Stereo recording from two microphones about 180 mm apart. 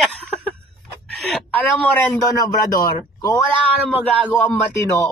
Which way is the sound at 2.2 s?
20° left (ahead or behind).